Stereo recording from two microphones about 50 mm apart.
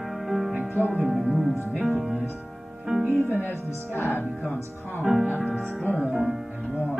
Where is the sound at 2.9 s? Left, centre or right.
Centre.